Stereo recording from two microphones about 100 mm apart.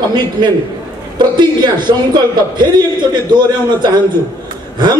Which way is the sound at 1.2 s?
50° right (ahead or behind).